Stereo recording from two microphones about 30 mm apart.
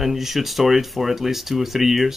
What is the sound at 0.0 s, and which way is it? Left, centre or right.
Speech, centre.